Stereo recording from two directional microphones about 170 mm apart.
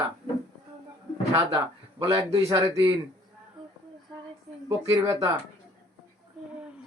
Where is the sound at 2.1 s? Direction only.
20° right (ahead or behind).